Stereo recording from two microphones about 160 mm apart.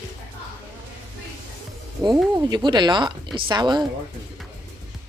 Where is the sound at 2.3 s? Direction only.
25° right (ahead or behind).